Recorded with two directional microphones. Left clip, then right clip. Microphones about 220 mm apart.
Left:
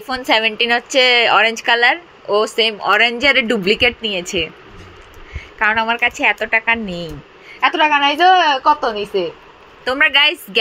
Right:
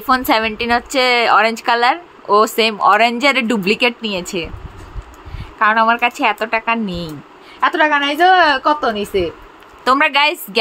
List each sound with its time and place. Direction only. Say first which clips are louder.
0.0 s a woman's voice: right 1 dB; 20° right (ahead or behind)
5.6 s a woman's voice: right 3 dB; 10° right (ahead or behind)
7.6 s a woman's voice: left 1 dB; 20° right (ahead or behind)
9.8 s a woman's voice: even; 15° right (ahead or behind)